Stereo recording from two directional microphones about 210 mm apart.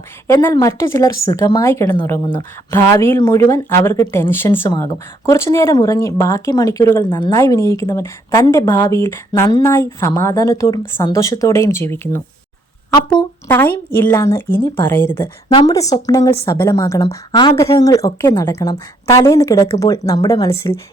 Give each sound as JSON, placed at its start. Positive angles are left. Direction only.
{"t": 0.3, "sound": "a woman's voice", "side_deg": 15}
{"t": 13.5, "sound": "a woman's voice", "side_deg": 10}